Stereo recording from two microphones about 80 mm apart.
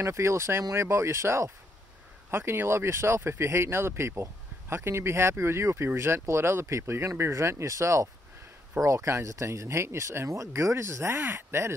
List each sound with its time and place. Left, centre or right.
0.0 s speech: right